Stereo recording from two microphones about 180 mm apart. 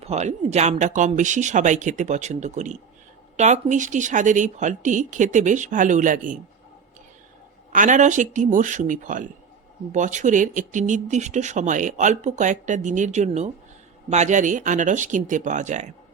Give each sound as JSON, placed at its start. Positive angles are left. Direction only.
{"t": 0.0, "sound": "speech", "side_deg": -40}
{"t": 7.7, "sound": "speech", "side_deg": -45}